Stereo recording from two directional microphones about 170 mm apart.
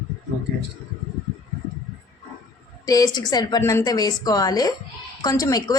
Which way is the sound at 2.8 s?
20° left (ahead or behind).